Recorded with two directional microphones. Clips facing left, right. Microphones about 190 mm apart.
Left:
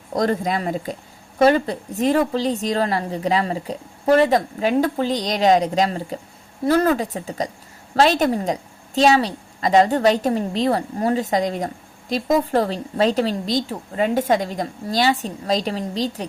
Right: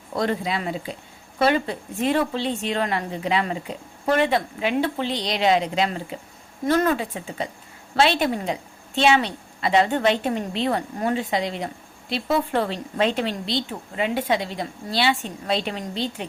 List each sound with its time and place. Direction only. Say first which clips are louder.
0.1 s a woman's voice: left 4 dB; 40° left (ahead or behind)